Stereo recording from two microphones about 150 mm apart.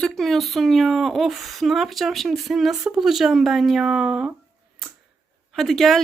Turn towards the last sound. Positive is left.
turn(degrees=0)  # may be behind; listen again after turning